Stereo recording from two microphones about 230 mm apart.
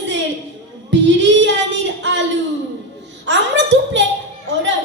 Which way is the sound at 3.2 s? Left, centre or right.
Right.